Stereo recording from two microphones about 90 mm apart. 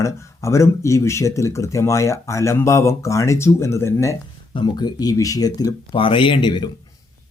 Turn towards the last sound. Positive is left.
turn(degrees=55)  # may be behind; listen again after turning